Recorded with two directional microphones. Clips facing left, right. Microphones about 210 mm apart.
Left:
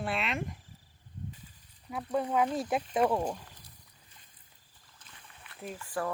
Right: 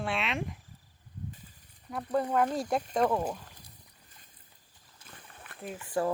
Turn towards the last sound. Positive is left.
turn(degrees=-20)  # may be behind; listen again after turning